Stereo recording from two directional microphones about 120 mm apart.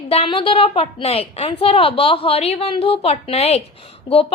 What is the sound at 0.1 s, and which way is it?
A woman's voice, 50° left (ahead or behind).